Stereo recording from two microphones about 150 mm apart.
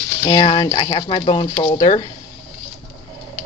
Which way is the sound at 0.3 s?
35° left (ahead or behind).